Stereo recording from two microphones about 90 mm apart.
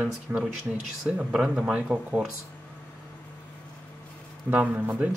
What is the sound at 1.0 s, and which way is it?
Speech, 10° right (ahead or behind).